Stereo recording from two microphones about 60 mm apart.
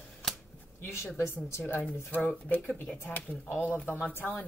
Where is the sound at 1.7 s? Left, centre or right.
Left.